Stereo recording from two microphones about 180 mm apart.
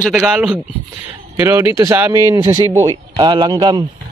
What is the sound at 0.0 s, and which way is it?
Speech, 5° right (ahead or behind).